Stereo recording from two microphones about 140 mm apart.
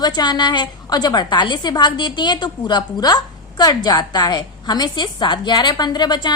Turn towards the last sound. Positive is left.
turn(degrees=30)  # may be behind; listen again after turning